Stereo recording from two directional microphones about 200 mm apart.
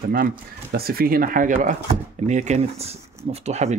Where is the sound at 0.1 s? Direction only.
50° right (ahead or behind).